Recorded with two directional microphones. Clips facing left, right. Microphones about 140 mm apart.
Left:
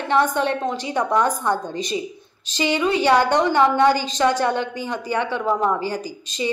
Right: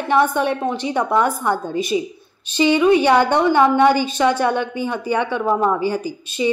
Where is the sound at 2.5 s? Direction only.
15° right (ahead or behind).